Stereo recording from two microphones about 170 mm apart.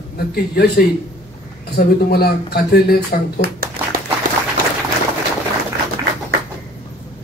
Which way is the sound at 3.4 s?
60° right (ahead or behind).